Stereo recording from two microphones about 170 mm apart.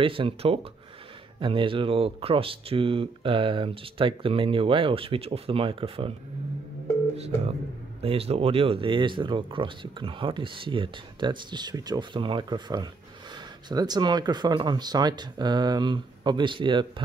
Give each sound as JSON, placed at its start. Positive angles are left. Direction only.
{"t": 0.0, "sound": "speech", "side_deg": -30}
{"t": 8.0, "sound": "speech", "side_deg": -35}